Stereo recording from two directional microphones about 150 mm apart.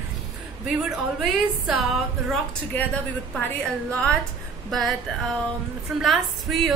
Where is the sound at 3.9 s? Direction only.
5° left (ahead or behind).